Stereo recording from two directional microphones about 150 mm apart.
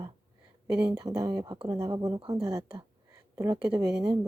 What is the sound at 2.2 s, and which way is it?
Speech, 35° right (ahead or behind).